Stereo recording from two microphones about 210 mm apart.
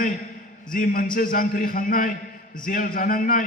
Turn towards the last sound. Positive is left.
turn(degrees=40)  # may be behind; listen again after turning